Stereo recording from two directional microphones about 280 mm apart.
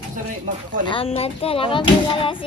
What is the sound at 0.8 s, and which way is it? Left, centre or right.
Speech, centre.